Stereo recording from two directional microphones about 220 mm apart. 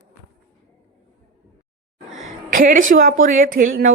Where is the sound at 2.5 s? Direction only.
40° right (ahead or behind).